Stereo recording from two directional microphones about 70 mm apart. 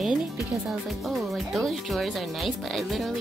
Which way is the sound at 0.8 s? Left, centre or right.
Centre.